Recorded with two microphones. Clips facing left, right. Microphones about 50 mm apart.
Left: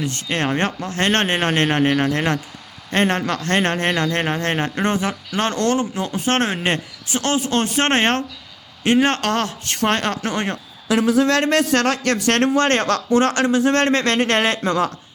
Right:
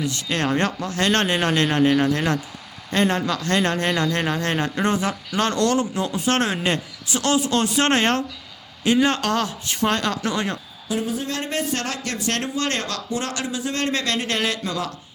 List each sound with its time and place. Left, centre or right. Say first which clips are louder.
0.0 s a man's voice: left 1 dB; left
10.8 s speech: left 9 dB; left